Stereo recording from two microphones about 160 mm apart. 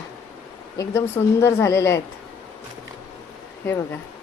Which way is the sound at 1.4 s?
15° left (ahead or behind).